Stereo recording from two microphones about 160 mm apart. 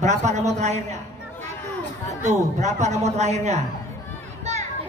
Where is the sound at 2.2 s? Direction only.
45° right (ahead or behind).